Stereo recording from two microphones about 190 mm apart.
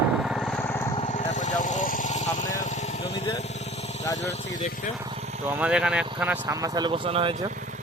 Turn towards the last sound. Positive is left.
turn(degrees=-30)  # may be behind; listen again after turning